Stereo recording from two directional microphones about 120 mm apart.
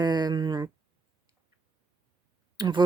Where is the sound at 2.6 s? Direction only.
35° right (ahead or behind).